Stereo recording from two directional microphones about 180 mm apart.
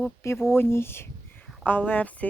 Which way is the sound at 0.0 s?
15° left (ahead or behind).